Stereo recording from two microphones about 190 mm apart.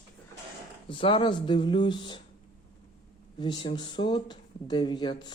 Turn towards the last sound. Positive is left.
turn(degrees=25)  # may be behind; listen again after turning